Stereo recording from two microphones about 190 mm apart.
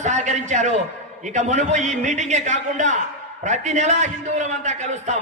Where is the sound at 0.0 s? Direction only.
40° right (ahead or behind).